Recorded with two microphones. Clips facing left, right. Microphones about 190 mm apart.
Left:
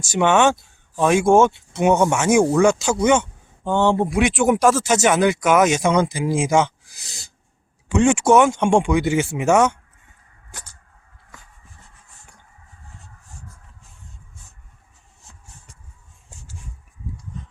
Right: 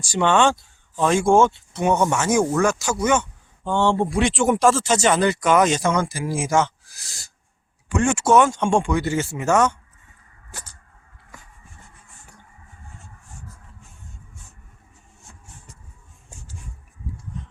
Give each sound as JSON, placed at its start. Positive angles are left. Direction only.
{"t": 0.0, "sound": "speech", "side_deg": 20}
{"t": 3.0, "sound": "speech", "side_deg": 15}